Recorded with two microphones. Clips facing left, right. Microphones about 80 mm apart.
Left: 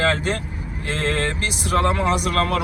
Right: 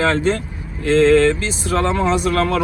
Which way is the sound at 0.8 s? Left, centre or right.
Left.